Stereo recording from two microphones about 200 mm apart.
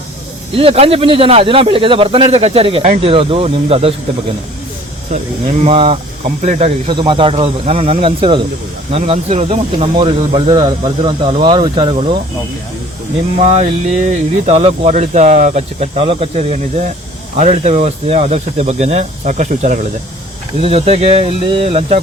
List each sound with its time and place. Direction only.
0.5 s speech: 30° right (ahead or behind)
5.6 s speech: 30° right (ahead or behind)
13.4 s speech: 30° right (ahead or behind)